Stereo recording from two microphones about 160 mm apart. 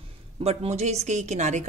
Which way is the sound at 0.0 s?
40° right (ahead or behind).